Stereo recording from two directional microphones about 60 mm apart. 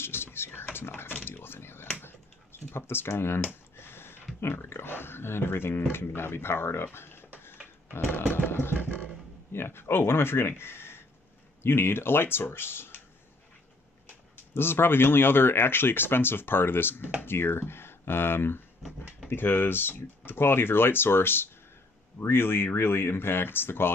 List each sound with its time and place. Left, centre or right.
0.0 s a sound: left
2.0 s computer keyboard: left
3.7 s a sound: left
4.4 s speech: left
8.7 s a sound: left
9.5 s speech: left
14.0 s speech: left
18.8 s speech: centre
19.2 s speech: left